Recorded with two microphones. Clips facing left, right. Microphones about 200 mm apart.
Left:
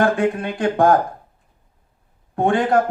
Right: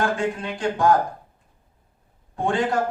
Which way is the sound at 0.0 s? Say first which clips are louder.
Left 6 dB; 60° left (ahead or behind).